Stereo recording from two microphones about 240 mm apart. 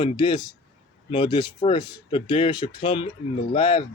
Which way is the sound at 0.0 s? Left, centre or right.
Left.